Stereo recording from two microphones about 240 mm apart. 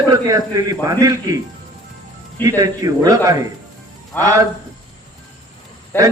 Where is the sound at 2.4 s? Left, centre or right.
Centre.